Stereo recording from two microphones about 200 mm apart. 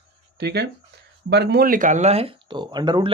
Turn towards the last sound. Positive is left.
turn(degrees=-20)  # may be behind; listen again after turning